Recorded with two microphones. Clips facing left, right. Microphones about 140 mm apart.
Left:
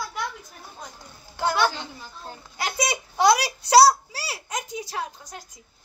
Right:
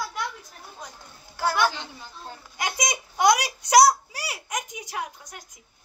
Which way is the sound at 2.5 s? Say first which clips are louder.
Left 2 dB; 15° right (ahead or behind).